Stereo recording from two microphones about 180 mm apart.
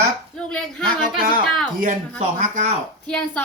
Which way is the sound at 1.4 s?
Centre (ahead or behind).